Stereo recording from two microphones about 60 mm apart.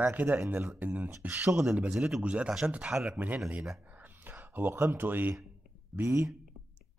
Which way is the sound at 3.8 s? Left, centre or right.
Right.